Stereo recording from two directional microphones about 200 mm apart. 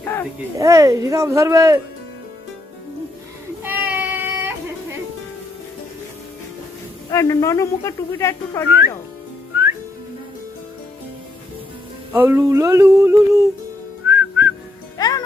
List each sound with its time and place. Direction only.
0.0 s a sound: 10° left (ahead or behind)
0.5 s music: 15° right (ahead or behind)
3.6 s child singing: 10° right (ahead or behind)
7.1 s a woman's voice: 15° left (ahead or behind)
12.1 s music: 10° right (ahead or behind)
14.1 s whistling: 10° right (ahead or behind)
14.9 s music: 20° left (ahead or behind)